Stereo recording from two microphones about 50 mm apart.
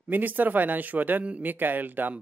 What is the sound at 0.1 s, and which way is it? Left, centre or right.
Speech, right.